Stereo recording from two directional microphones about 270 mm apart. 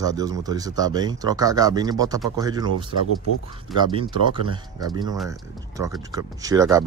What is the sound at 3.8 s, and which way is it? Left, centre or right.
Speech, centre.